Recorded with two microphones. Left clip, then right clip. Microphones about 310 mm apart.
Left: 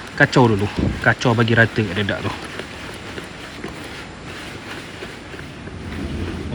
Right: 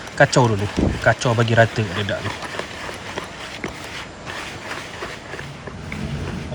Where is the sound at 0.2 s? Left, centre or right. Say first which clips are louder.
Left 1 dB; centre.